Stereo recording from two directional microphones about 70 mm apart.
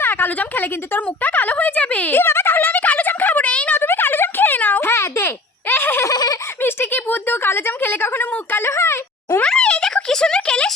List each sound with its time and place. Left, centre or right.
0.0 s speech: left
3.8 s a sound: left
4.9 s baby laughter: left
6.1 s giggle: left
6.6 s a woman's voice: left
9.4 s a sound: centre